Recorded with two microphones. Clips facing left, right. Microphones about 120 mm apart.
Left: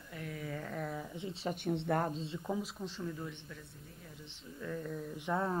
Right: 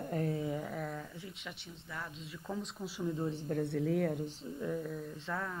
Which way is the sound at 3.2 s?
35° right (ahead or behind).